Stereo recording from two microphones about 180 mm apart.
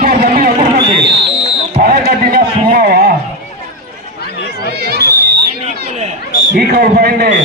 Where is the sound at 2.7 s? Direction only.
55° right (ahead or behind).